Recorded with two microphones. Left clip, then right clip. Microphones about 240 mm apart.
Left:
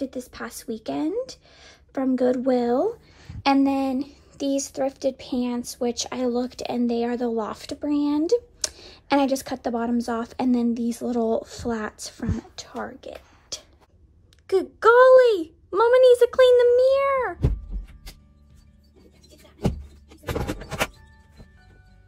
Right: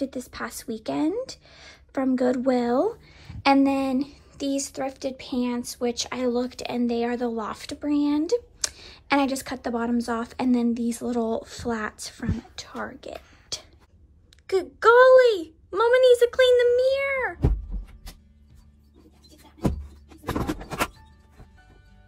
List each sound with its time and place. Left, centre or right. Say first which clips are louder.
0.0 s speech: right 1 dB; centre